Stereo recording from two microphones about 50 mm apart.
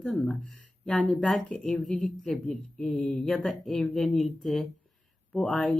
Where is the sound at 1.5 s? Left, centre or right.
Centre.